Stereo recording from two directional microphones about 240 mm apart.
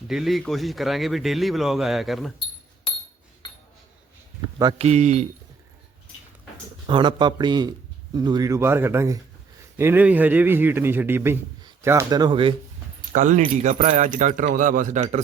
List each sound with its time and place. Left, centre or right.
0.1 s speech: centre
4.4 s speech: centre
6.8 s a man's voice: centre
13.1 s speech: right